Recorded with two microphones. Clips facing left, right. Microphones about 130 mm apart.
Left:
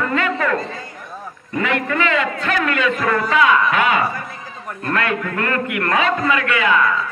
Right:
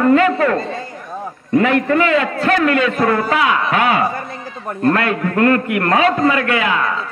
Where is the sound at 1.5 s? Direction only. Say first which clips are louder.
Right 7 dB; 40° right (ahead or behind).